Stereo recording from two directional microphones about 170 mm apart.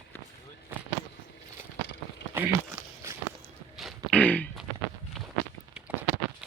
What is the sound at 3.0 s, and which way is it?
Walk, 15° right (ahead or behind).